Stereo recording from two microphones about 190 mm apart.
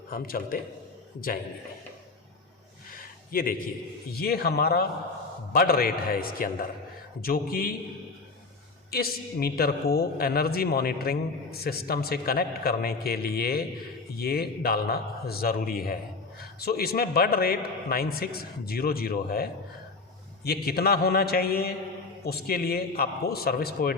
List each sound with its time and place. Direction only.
0.1 s a man's voice: 50° left (ahead or behind)
3.3 s a man's voice: 50° left (ahead or behind)
8.9 s a man's voice: 55° left (ahead or behind)